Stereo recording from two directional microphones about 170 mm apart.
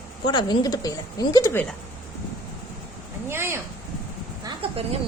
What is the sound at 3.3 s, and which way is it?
Speech, 15° right (ahead or behind).